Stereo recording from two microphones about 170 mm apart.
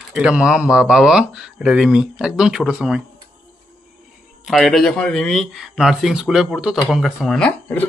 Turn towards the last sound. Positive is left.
turn(degrees=5)  # may be behind; listen again after turning